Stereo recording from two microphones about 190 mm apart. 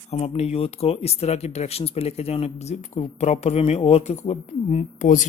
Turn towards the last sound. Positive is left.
turn(degrees=40)  # may be behind; listen again after turning